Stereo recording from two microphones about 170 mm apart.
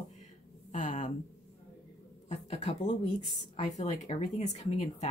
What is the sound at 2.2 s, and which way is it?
Speech, 40° left (ahead or behind).